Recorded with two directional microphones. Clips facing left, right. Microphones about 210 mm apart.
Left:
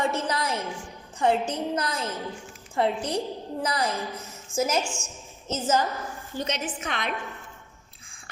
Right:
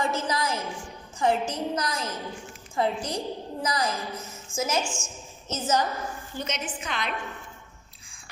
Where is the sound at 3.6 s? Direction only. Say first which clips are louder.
Left 1 dB; 30° left (ahead or behind).